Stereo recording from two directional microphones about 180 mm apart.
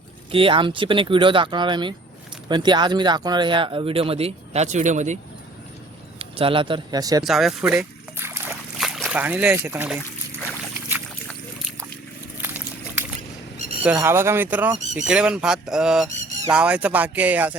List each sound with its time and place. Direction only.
0.3 s speech: 30° right (ahead or behind)
6.1 s speech: 30° right (ahead or behind)
7.3 s a sound: centre (ahead or behind)
8.8 s speech: centre (ahead or behind)
10.8 s boat: 15° right (ahead or behind)
12.4 s a sound: 10° right (ahead or behind)
13.8 s speech: 15° right (ahead or behind)